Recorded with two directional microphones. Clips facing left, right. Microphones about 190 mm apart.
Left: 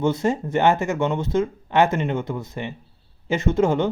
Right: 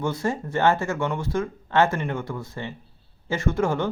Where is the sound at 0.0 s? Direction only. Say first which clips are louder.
Left 5 dB; 20° left (ahead or behind).